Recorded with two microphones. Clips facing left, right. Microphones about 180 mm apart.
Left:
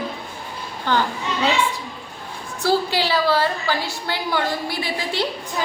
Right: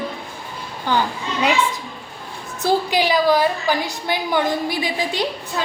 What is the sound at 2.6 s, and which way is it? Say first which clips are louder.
A woman's voice: right 2 dB; 15° right (ahead or behind).